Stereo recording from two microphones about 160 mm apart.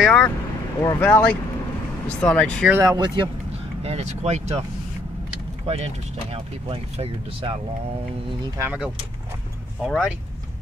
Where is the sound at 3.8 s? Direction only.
40° right (ahead or behind).